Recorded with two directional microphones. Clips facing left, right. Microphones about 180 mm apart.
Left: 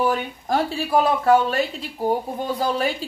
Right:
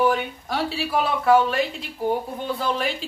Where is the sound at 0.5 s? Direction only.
45° left (ahead or behind).